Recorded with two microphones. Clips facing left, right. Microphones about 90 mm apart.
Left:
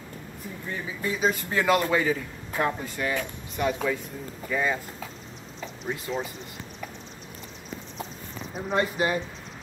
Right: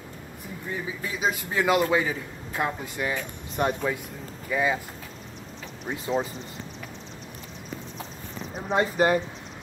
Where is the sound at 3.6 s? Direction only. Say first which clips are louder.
Right 1 dB; 35° right (ahead or behind).